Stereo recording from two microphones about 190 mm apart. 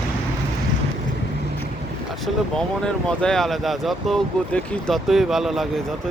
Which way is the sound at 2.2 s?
5° left (ahead or behind).